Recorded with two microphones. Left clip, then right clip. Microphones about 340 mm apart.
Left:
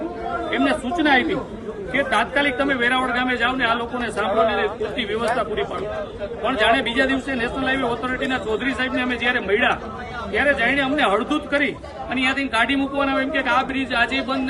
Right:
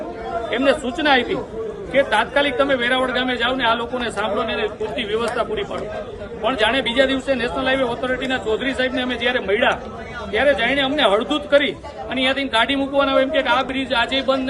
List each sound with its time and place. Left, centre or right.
0.5 s a man's voice: centre
6.4 s a man's voice: centre